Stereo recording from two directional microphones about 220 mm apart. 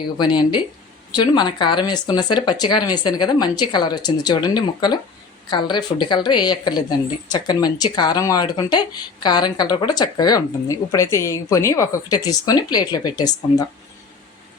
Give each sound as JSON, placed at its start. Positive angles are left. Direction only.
{"t": 0.2, "sound": "speech", "side_deg": 20}